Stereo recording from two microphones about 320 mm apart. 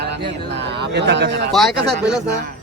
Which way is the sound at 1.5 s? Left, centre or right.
Centre.